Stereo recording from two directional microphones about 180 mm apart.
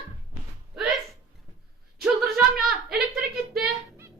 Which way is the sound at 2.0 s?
Centre (ahead or behind).